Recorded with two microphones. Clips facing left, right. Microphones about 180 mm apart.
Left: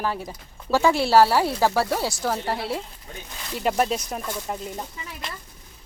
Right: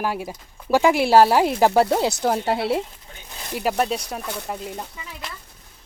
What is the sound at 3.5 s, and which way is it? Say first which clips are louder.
Speech: even; 5° right (ahead or behind).